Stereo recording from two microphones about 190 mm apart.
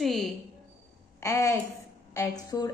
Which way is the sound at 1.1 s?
15° left (ahead or behind).